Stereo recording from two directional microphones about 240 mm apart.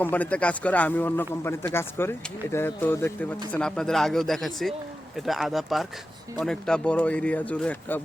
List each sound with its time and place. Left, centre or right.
0.0 s speech: centre